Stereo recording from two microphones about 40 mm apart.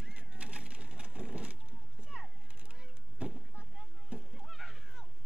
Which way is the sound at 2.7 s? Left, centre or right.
Right.